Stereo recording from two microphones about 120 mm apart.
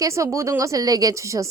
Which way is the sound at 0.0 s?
25° right (ahead or behind).